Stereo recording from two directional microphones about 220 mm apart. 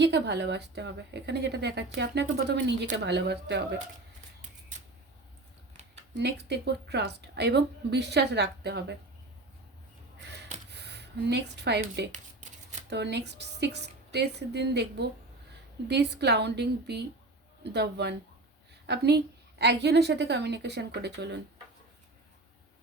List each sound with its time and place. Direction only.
0.0 s a woman's voice: 50° right (ahead or behind)
6.0 s a woman's voice: 50° right (ahead or behind)
10.7 s a woman's voice: 50° right (ahead or behind)